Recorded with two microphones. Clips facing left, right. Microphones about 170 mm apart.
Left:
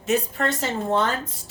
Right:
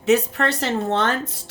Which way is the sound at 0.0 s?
70° right (ahead or behind).